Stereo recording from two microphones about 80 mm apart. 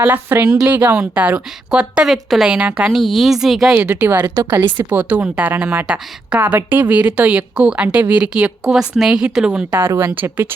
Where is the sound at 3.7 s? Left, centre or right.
Centre.